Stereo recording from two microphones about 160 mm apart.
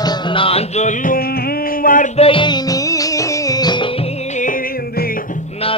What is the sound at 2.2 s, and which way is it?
Music, 35° left (ahead or behind).